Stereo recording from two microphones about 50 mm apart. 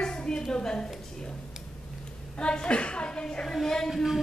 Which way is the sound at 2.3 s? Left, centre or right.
Centre.